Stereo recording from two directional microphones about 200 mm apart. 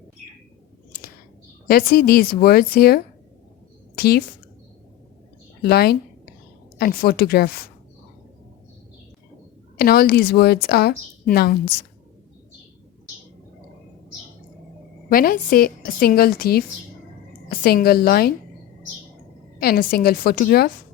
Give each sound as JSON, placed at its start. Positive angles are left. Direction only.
{"t": 1.6, "sound": "a woman's voice", "side_deg": 50}
{"t": 3.9, "sound": "a sound", "side_deg": 50}
{"t": 5.6, "sound": "a woman's voice", "side_deg": 50}
{"t": 9.7, "sound": "a woman's voice", "side_deg": 50}
{"t": 15.1, "sound": "a woman's voice", "side_deg": 45}
{"t": 19.5, "sound": "a woman's voice", "side_deg": 50}